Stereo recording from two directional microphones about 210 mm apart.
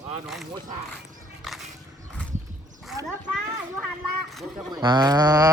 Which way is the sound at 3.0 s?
15° right (ahead or behind).